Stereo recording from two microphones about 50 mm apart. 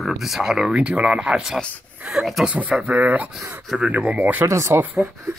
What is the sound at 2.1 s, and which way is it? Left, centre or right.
Speech, centre.